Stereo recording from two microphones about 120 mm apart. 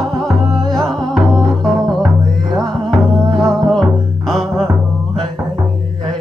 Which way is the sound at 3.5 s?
5° left (ahead or behind).